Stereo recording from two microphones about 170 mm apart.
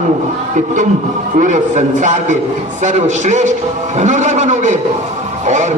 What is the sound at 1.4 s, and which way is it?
A man's voice, 45° right (ahead or behind).